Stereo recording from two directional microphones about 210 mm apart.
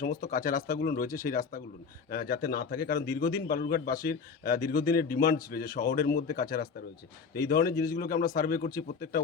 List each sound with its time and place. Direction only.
0.0 s a man's voice: 40° left (ahead or behind)